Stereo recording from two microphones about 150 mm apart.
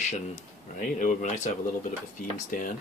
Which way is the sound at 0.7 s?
60° left (ahead or behind).